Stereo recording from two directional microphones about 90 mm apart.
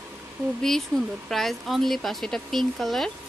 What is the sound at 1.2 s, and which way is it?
Speech, centre (ahead or behind).